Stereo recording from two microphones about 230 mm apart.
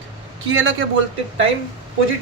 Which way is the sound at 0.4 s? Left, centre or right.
Right.